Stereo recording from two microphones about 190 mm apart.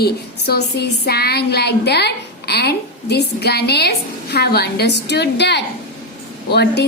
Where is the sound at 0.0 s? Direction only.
55° left (ahead or behind).